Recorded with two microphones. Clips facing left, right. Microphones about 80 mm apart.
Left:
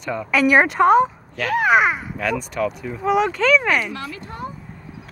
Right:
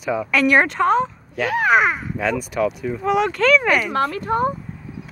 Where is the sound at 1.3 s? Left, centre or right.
Centre.